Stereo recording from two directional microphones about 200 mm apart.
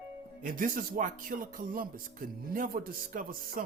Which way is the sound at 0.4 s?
45° right (ahead or behind).